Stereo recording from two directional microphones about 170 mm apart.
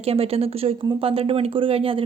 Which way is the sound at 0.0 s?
35° right (ahead or behind).